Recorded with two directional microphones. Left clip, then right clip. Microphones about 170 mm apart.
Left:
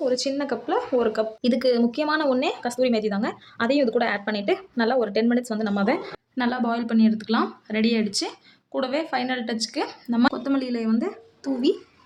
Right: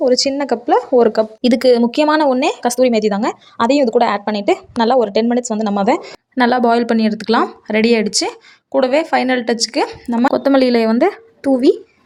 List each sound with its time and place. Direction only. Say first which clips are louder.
0.0 s a woman's voice: right 10 dB; 35° right (ahead or behind)
6.3 s a woman's voice: right 13 dB; 45° right (ahead or behind)
10.3 s speech: right 14 dB; 50° right (ahead or behind)